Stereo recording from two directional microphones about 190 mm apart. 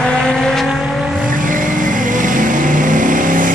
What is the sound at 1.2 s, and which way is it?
Vehicle, 45° right (ahead or behind).